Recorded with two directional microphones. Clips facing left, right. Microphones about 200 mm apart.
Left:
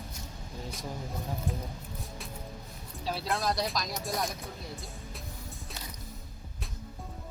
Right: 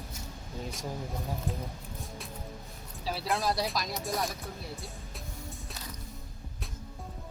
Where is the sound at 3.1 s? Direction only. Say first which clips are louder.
Right 1 dB; centre (ahead or behind).